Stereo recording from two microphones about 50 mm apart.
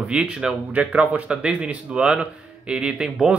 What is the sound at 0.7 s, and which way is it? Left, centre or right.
A man's voice, right.